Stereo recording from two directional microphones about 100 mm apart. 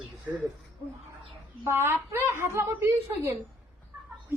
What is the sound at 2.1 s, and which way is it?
Chuckle, 25° right (ahead or behind).